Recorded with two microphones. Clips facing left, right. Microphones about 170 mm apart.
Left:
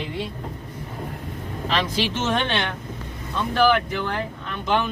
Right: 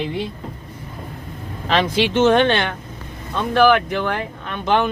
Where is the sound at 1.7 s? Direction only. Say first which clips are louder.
Right 6 dB; 65° right (ahead or behind).